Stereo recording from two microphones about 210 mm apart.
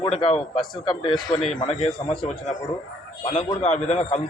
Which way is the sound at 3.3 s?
30° left (ahead or behind).